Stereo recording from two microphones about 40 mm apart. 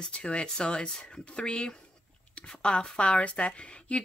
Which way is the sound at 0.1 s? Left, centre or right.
Left.